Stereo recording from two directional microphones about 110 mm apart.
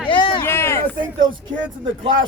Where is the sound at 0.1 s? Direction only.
50° left (ahead or behind).